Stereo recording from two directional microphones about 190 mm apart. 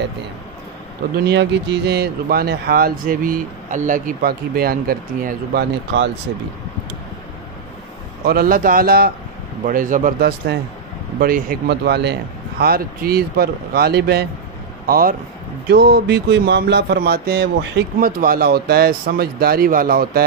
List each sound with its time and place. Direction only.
1.1 s speech: 60° right (ahead or behind)
8.3 s speech: 50° right (ahead or behind); by 17.8 s 65° right (ahead or behind)
17.9 s speech: 50° right (ahead or behind)